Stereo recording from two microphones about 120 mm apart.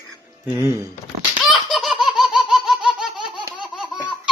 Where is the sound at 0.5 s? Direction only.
25° right (ahead or behind).